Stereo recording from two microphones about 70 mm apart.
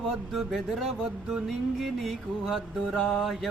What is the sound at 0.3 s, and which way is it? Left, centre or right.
Music, centre.